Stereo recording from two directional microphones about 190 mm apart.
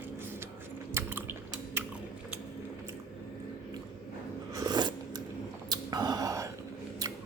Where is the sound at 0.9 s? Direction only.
10° right (ahead or behind).